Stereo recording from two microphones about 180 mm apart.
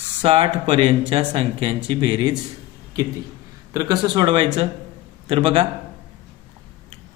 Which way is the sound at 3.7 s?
20° right (ahead or behind).